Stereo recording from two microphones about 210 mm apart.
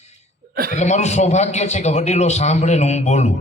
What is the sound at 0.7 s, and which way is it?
A man's voice, 35° left (ahead or behind).